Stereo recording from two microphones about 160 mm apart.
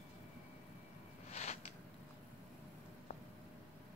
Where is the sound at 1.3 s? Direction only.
40° left (ahead or behind).